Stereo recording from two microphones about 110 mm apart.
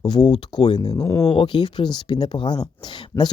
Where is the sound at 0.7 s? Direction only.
40° left (ahead or behind).